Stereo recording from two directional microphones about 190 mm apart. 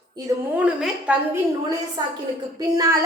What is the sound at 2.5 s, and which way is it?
Speech, 20° right (ahead or behind).